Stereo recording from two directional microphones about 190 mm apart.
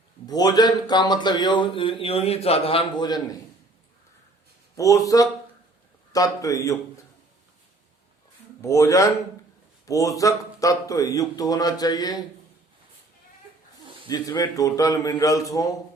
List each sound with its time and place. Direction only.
0.3 s speech: 20° left (ahead or behind)
4.8 s a man's voice: 15° left (ahead or behind)
8.6 s a man's voice: 15° left (ahead or behind)
14.1 s a man's voice: 20° left (ahead or behind)